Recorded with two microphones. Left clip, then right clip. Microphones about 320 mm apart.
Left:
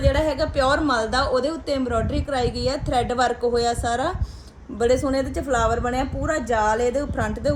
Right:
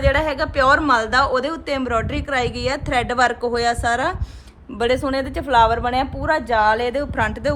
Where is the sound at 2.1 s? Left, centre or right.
Right.